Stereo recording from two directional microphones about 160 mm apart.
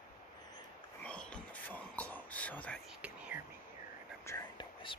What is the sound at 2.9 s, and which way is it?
Whispering, 10° right (ahead or behind).